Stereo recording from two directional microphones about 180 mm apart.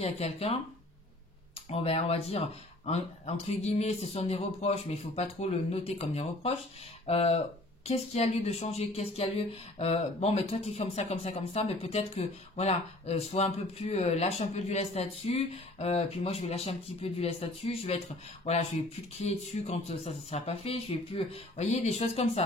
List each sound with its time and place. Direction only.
0.0 s speech: 35° left (ahead or behind)
1.7 s speech: 35° left (ahead or behind)